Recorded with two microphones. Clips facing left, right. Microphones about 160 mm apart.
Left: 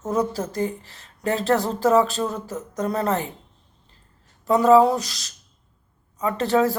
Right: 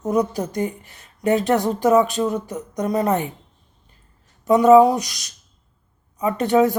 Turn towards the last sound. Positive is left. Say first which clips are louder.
# right 3 dB
turn(degrees=-20)  # may be behind; listen again after turning